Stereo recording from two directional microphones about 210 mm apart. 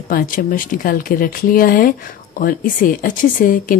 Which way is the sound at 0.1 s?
40° left (ahead or behind).